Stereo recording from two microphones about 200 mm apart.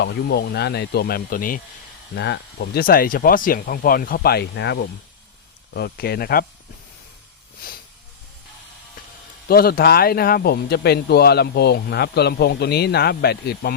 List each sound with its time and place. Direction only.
0.0 s speech: 55° left (ahead or behind)
2.1 s speech: 60° left (ahead or behind)
9.5 s speech: 50° left (ahead or behind)